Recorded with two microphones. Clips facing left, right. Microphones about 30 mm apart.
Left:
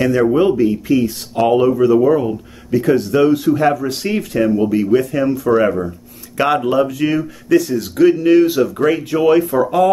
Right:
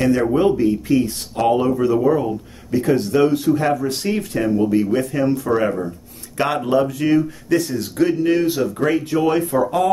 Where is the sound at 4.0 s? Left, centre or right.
Left.